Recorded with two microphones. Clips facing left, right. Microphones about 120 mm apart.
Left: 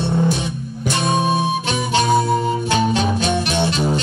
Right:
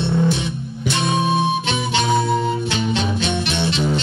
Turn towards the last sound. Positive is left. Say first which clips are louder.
# left 2 dB
turn(degrees=40)  # may be behind; listen again after turning